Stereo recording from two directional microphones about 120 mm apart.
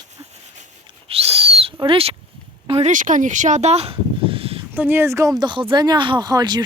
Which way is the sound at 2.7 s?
80° right.